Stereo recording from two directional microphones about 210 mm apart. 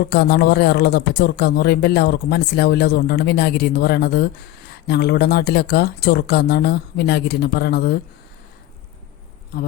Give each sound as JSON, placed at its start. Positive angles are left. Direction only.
{"t": 0.1, "sound": "a man's voice", "side_deg": 50}